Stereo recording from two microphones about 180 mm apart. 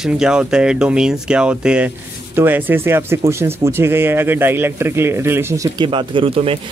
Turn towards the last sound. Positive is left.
turn(degrees=-30)  # may be behind; listen again after turning